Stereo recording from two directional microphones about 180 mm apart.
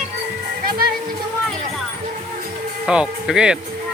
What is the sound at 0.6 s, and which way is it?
Music, 55° right (ahead or behind).